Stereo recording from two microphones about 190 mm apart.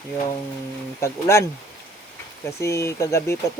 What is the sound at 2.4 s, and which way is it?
Speech, 15° left (ahead or behind).